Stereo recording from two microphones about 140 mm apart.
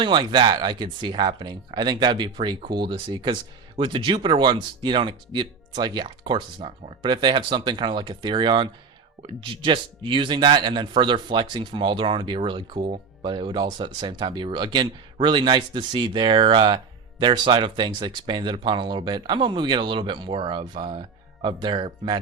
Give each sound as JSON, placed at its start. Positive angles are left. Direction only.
{"t": 0.0, "sound": "speech", "side_deg": -35}